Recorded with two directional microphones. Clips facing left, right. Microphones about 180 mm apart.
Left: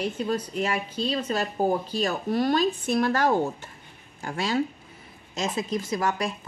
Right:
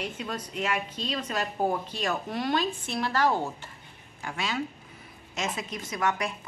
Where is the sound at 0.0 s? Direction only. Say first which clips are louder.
Left 7 dB; 35° left (ahead or behind).